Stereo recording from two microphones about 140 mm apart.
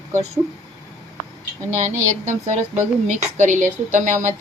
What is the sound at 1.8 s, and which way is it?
Speech, 60° right (ahead or behind).